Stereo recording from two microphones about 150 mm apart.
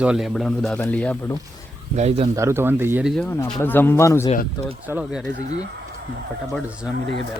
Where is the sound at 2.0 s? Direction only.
45° right (ahead or behind).